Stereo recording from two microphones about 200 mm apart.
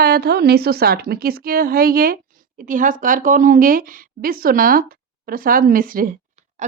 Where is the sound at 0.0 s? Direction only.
50° right (ahead or behind).